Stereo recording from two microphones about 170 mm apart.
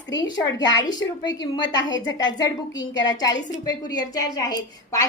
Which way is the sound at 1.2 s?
25° left (ahead or behind).